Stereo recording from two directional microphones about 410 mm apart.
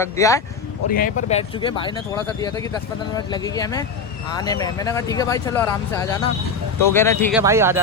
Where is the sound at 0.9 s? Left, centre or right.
Left.